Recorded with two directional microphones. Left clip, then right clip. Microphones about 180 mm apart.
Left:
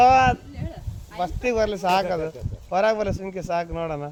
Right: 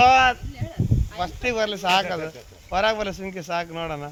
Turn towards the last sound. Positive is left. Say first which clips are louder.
# left 1 dB
turn(degrees=50)  # may be behind; listen again after turning